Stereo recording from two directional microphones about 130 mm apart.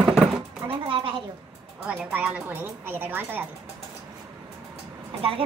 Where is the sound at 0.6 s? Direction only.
40° right (ahead or behind).